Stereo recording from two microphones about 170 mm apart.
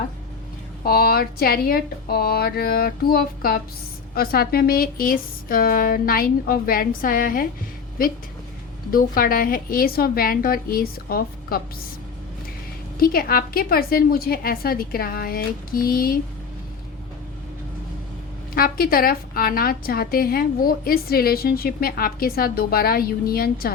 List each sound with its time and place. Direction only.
0.9 s a woman's voice: 65° left (ahead or behind)
8.9 s a woman's voice: 60° left (ahead or behind)
13.0 s a woman's voice: 60° left (ahead or behind)
18.5 s a woman's voice: 60° left (ahead or behind)